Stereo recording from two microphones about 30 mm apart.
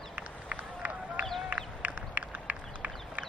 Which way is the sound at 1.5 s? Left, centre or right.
Right.